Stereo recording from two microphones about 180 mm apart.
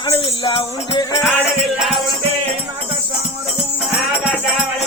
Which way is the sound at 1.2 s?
Centre (ahead or behind).